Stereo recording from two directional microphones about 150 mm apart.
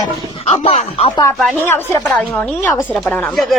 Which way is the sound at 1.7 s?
15° left (ahead or behind).